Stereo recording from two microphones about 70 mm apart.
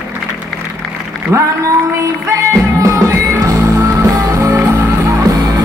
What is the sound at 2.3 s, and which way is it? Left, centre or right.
Music, right.